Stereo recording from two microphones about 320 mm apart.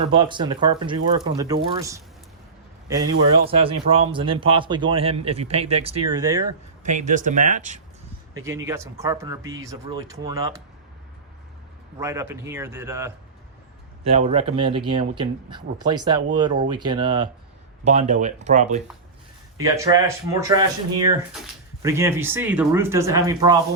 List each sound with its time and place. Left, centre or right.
0.0 s speech: centre
6.8 s speech: right
8.3 s speech: centre
11.9 s speech: centre
14.1 s speech: centre
19.5 s speech: centre